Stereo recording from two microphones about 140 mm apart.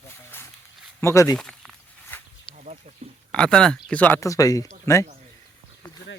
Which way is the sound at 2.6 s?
60° right (ahead or behind).